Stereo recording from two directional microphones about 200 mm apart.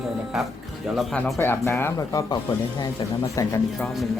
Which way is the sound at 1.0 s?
Centre (ahead or behind).